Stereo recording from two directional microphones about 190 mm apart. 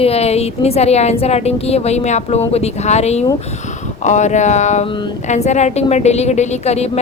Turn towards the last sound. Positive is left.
turn(degrees=35)  # may be behind; listen again after turning